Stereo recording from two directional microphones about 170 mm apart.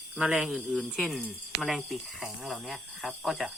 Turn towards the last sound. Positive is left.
turn(degrees=0)  # may be behind; listen again after turning